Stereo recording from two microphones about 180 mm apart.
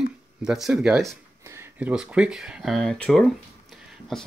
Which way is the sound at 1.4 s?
15° right (ahead or behind).